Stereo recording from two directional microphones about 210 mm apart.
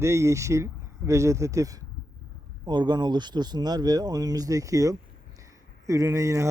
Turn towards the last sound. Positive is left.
turn(degrees=-15)  # may be behind; listen again after turning